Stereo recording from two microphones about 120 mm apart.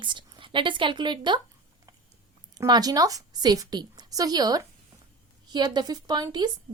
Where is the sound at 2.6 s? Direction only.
35° right (ahead or behind).